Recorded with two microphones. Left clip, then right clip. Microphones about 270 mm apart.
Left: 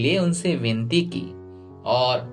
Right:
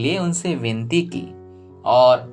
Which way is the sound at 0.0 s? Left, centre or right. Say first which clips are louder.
Even; right.